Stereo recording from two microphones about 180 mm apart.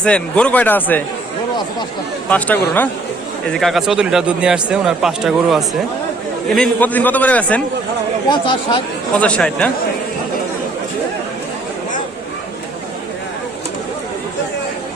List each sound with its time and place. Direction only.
0.0 s a man's voice: 5° left (ahead or behind)
2.3 s a man's voice: 10° left (ahead or behind)
8.3 s speech: 25° left (ahead or behind)
9.1 s a man's voice: 5° left (ahead or behind)